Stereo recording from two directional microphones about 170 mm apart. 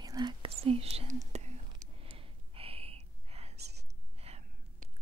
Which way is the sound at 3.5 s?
75° right (ahead or behind).